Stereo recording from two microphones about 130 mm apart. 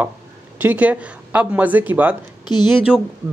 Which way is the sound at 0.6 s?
15° right (ahead or behind).